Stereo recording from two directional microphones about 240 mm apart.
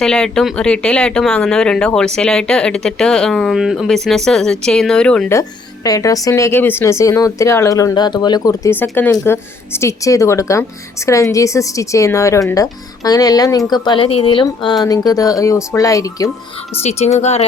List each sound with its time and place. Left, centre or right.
0.0 s a woman's voice: centre
16.8 s speech: left